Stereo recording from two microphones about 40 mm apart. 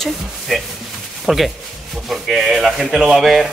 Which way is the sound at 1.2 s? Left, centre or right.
Centre.